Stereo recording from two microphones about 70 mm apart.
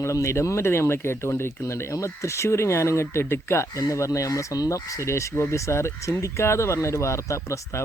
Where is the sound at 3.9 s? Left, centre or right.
Left.